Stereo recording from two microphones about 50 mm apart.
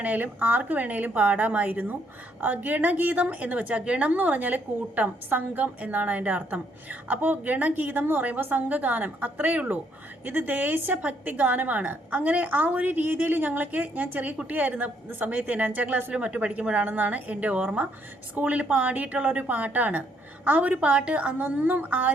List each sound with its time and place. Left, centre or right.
0.0 s a woman's voice: right